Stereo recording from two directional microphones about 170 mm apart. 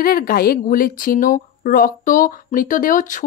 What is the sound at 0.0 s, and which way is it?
Speech, 60° left (ahead or behind).